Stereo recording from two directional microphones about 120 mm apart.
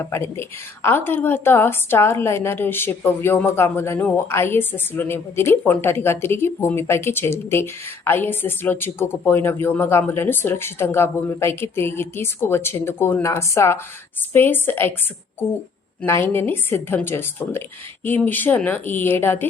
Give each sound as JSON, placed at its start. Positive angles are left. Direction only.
{"t": 0.0, "sound": "a woman's voice", "side_deg": 20}
{"t": 16.0, "sound": "a woman's voice", "side_deg": 20}